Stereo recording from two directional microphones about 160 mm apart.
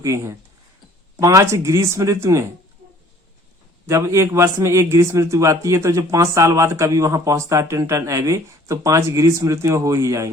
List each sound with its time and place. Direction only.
0.0 s a man's voice: 15° right (ahead or behind)
3.8 s a man's voice: 15° right (ahead or behind)